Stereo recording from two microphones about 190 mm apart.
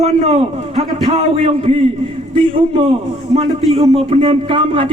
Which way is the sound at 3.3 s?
35° right (ahead or behind).